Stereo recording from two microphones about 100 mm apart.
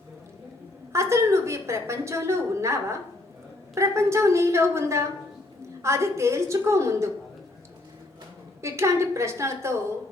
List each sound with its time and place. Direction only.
0.9 s a woman's voice: 30° right (ahead or behind)
8.6 s a woman's voice: 30° right (ahead or behind)